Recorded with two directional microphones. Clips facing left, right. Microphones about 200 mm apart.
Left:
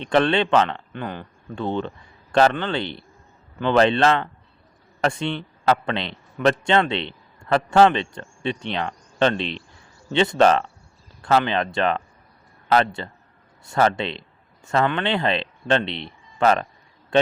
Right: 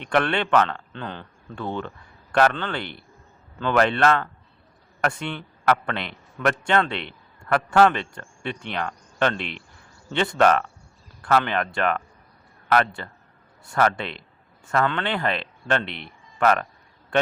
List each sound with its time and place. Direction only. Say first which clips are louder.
0.1 s a man's voice: left 3 dB; 20° left (ahead or behind)